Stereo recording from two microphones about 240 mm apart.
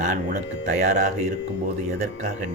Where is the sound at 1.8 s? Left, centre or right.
Right.